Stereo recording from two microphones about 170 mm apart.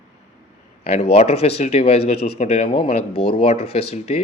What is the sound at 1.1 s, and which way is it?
Speech, 35° left (ahead or behind).